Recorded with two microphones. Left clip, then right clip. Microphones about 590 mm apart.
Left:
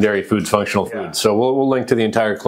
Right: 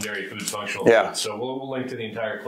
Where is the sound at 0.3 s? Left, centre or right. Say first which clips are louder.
Left 13 dB; left.